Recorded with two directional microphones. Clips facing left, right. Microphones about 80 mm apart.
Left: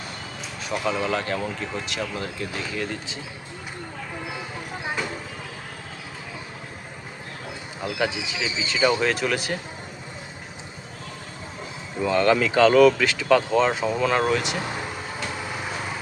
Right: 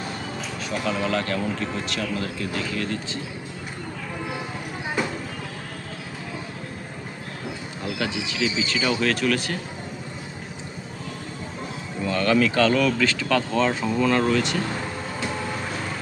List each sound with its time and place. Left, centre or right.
0.9 s speech: centre
7.8 s speech: centre
12.0 s speech: left